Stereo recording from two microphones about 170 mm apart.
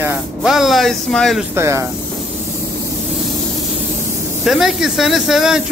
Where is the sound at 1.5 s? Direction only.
15° right (ahead or behind).